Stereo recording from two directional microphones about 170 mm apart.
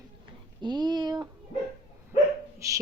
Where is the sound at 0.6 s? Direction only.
25° right (ahead or behind).